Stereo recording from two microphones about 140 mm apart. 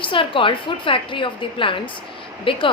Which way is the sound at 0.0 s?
40° left (ahead or behind).